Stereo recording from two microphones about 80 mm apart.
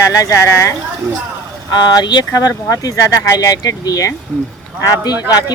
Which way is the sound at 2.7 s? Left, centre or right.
Left.